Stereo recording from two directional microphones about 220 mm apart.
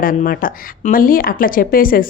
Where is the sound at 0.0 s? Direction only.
40° left (ahead or behind).